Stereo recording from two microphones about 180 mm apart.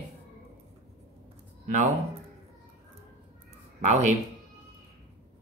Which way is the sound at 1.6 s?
40° right (ahead or behind).